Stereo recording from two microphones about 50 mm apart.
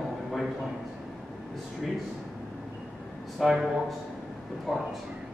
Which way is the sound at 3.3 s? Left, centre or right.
Centre.